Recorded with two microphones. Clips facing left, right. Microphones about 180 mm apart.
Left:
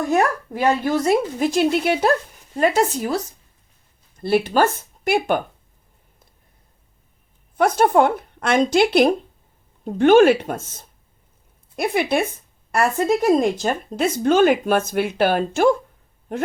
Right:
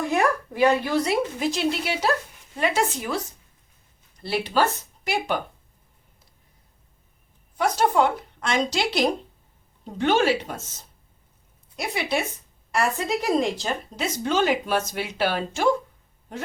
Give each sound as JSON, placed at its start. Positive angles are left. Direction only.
{"t": 0.1, "sound": "speech", "side_deg": 45}
{"t": 4.2, "sound": "speech", "side_deg": 50}
{"t": 7.6, "sound": "speech", "side_deg": 55}